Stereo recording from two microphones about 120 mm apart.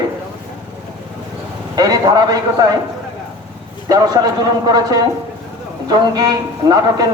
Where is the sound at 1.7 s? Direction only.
30° right (ahead or behind).